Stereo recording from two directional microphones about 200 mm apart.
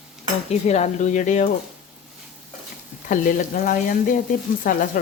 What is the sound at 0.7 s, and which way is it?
Speech, 35° left (ahead or behind).